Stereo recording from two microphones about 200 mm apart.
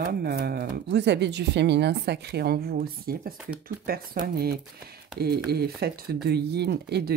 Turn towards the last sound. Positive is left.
turn(degrees=-55)  # may be behind; listen again after turning